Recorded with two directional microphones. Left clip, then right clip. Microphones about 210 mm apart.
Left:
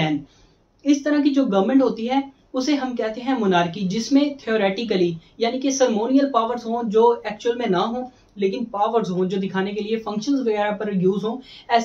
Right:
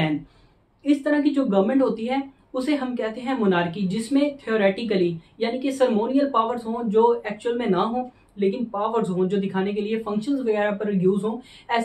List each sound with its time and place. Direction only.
0.8 s a woman's voice: 5° left (ahead or behind)